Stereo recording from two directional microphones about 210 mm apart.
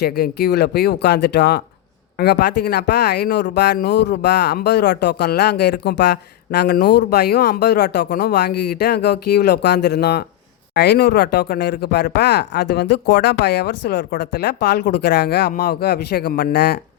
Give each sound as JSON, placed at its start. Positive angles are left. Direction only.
{"t": 0.0, "sound": "speech", "side_deg": 50}